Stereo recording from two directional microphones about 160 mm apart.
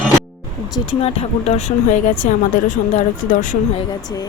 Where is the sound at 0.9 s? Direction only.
40° left (ahead or behind).